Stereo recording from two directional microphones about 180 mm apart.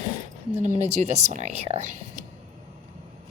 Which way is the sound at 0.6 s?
40° right (ahead or behind).